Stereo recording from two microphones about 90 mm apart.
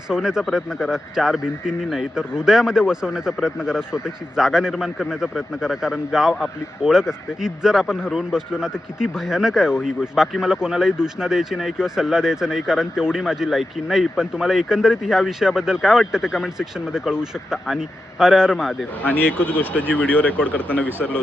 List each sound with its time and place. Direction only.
0.1 s speech: 5° right (ahead or behind)
19.9 s speech: 15° left (ahead or behind)